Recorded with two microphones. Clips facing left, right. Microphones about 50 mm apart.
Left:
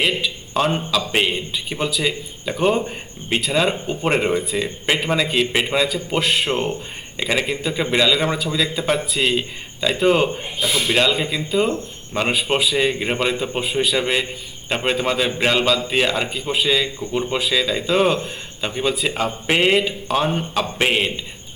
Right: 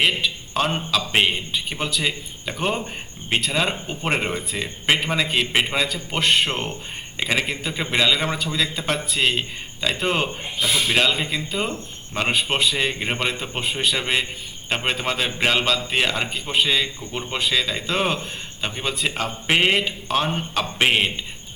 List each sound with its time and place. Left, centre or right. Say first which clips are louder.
0.0 s a sound: even; centre
1.5 s a man's voice: left 2 dB; centre
10.6 s a man's voice: left 1 dB; left
10.8 s a man's voice: left 4 dB; centre